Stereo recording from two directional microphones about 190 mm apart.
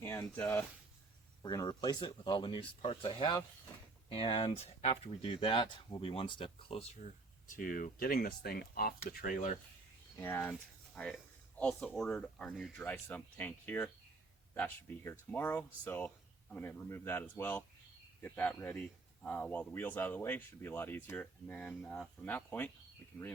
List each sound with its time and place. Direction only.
0.0 s speech: 10° left (ahead or behind); by 6.8 s 30° left (ahead or behind)
7.5 s speech: 45° left (ahead or behind)
10.2 s speech: 10° left (ahead or behind)